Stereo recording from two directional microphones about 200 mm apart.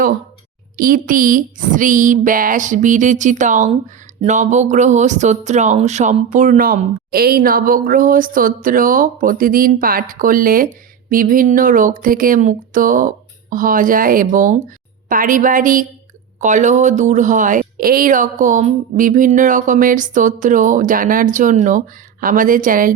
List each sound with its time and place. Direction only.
0.8 s speech: 45° right (ahead or behind)